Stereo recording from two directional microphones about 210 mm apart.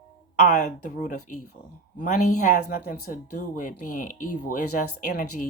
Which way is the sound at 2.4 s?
45° left (ahead or behind).